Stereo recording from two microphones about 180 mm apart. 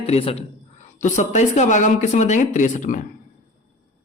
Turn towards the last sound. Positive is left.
turn(degrees=45)  # may be behind; listen again after turning